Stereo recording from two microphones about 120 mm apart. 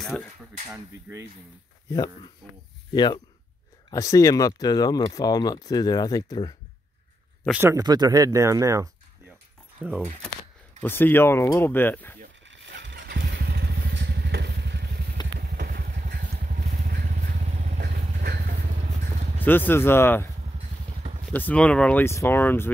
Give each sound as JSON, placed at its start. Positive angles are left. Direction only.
{"t": 0.0, "sound": "speech", "side_deg": 5}
{"t": 1.1, "sound": "speech", "side_deg": -10}
{"t": 1.9, "sound": "speech", "side_deg": 30}
{"t": 3.9, "sound": "speech", "side_deg": 25}
{"t": 7.5, "sound": "speech", "side_deg": -20}
{"t": 7.8, "sound": "speech", "side_deg": -35}
{"t": 9.8, "sound": "speech", "side_deg": -10}
{"t": 10.8, "sound": "speech", "side_deg": 15}
{"t": 15.2, "sound": "vehicle", "side_deg": 35}
{"t": 16.2, "sound": "vehicle", "side_deg": -90}
{"t": 19.4, "sound": "speech", "side_deg": 15}
{"t": 20.5, "sound": "motorcycle", "side_deg": -65}
{"t": 21.3, "sound": "speech", "side_deg": 15}
{"t": 22.0, "sound": "speech", "side_deg": 20}